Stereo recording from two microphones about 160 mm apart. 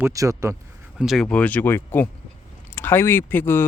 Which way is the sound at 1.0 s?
Centre (ahead or behind).